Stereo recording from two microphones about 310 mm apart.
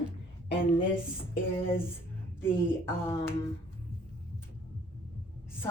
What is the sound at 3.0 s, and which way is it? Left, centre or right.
Speech, centre.